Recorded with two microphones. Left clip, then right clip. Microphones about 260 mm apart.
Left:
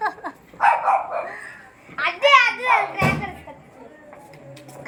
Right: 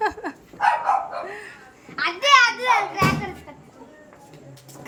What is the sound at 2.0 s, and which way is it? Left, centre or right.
Children playing, centre.